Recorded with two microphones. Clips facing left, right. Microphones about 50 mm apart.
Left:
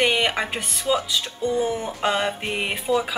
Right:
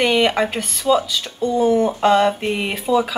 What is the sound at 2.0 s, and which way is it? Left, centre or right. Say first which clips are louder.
Speech: right 6 dB; centre.